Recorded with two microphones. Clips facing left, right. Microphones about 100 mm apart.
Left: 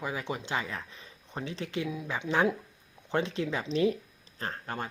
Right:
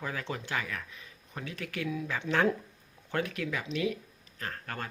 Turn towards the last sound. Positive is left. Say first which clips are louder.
# left 3 dB
turn(degrees=25)  # may be behind; listen again after turning